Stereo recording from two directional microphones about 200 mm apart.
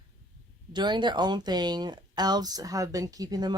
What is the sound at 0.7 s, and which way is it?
Speech, 20° right (ahead or behind).